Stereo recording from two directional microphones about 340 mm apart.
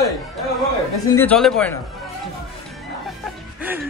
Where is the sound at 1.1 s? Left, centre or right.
Centre.